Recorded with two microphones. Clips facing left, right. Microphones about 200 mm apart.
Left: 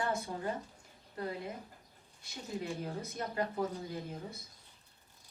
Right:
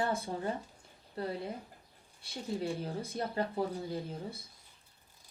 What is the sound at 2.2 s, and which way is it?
A woman's voice, 30° right (ahead or behind).